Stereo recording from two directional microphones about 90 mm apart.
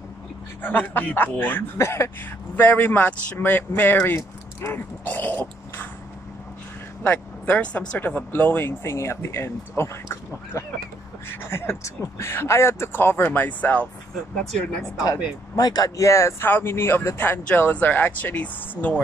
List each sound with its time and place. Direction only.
0.6 s speech: 20° left (ahead or behind)
4.6 s throat clearing: 25° left (ahead or behind)
7.0 s speech: 20° left (ahead or behind)
15.5 s speech: 45° left (ahead or behind)
16.1 s speech: 30° left (ahead or behind)